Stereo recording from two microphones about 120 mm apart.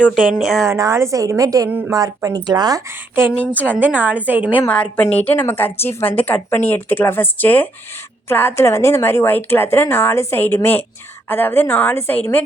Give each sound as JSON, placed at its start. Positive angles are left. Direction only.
{"t": 0.4, "sound": "a woman's voice", "side_deg": 0}
{"t": 0.7, "sound": "a woman's voice", "side_deg": -25}
{"t": 3.3, "sound": "a woman's voice", "side_deg": 10}
{"t": 3.8, "sound": "a woman's voice", "side_deg": -15}
{"t": 4.5, "sound": "a woman's voice", "side_deg": 10}